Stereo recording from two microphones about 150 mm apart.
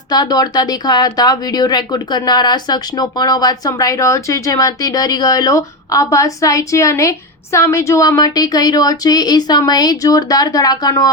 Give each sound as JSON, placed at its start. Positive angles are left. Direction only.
{"t": 0.1, "sound": "speech", "side_deg": 25}